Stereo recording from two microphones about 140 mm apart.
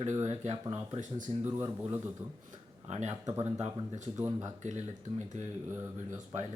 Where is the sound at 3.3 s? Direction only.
20° right (ahead or behind).